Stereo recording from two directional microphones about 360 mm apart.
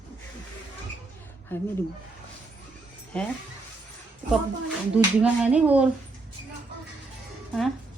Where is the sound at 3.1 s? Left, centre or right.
Centre.